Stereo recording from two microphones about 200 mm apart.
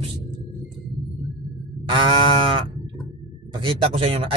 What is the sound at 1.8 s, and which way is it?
Speech, 25° right (ahead or behind).